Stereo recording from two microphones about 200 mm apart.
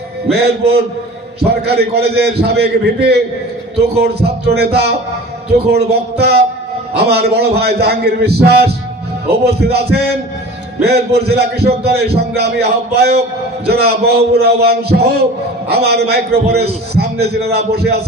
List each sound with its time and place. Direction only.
0.3 s a man's voice: 55° right (ahead or behind)